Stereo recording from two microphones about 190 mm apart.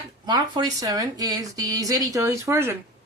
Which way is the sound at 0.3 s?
20° right (ahead or behind).